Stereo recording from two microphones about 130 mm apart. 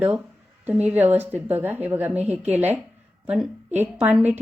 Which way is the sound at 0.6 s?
10° right (ahead or behind).